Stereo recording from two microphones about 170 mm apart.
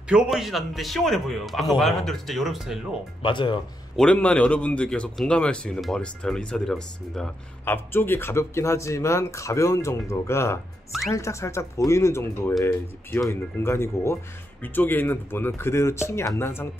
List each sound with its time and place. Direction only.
0.1 s a man's voice: 5° right (ahead or behind)
3.2 s speech: 30° left (ahead or behind)
3.9 s a man's voice: 5° left (ahead or behind)